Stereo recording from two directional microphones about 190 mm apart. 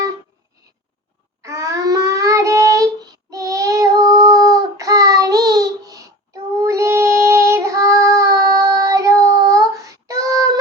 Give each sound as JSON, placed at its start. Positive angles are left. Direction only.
{"t": 1.4, "sound": "child singing", "side_deg": -15}